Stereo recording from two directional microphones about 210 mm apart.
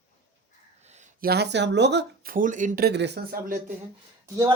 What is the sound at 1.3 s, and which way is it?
Speech, 55° right (ahead or behind).